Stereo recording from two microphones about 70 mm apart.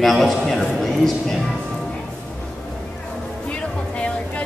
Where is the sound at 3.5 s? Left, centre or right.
Centre.